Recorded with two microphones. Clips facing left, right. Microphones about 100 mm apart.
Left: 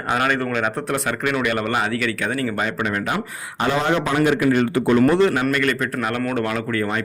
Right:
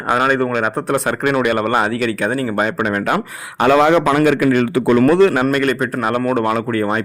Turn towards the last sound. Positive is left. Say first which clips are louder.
# right 5 dB
turn(degrees=-35)  # may be behind; listen again after turning